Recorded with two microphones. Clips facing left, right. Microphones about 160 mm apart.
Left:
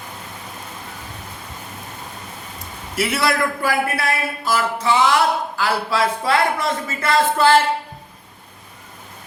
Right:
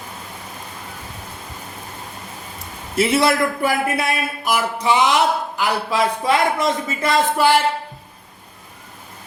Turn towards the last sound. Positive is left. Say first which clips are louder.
# left 1 dB
turn(degrees=-15)  # may be behind; listen again after turning